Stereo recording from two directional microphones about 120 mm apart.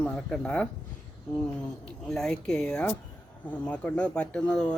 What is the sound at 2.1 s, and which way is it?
Speech, 5° left (ahead or behind).